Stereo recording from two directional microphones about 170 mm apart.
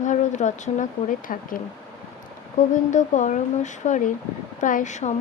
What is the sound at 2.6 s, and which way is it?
Speech, 45° left (ahead or behind).